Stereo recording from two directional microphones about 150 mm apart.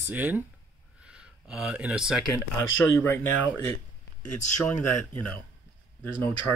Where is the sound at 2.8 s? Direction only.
15° left (ahead or behind).